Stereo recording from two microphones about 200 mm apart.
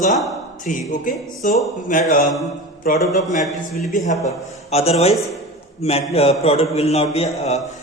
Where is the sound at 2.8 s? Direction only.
40° left (ahead or behind).